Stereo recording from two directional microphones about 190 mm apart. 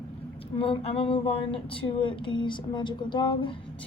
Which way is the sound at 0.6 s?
30° left (ahead or behind).